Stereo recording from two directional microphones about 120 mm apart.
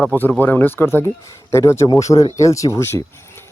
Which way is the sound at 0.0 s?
15° left (ahead or behind).